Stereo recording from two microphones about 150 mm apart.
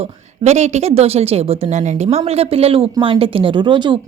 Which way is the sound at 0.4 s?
50° right (ahead or behind).